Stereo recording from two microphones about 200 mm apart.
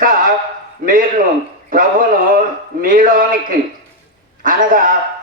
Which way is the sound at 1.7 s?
45° right (ahead or behind).